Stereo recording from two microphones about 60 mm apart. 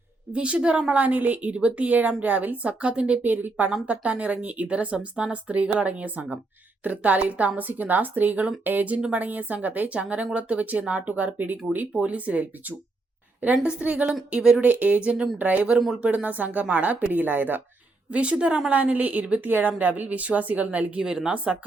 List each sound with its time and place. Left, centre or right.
0.3 s a woman's voice: centre
14.6 s a woman's voice: right
18.1 s a woman's voice: centre
21.0 s speech: centre